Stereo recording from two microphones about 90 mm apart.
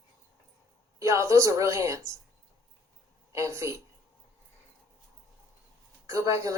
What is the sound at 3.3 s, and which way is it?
Speech, 35° right (ahead or behind).